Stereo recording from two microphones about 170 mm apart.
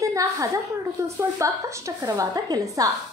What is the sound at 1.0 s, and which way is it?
A woman's voice, 15° right (ahead or behind).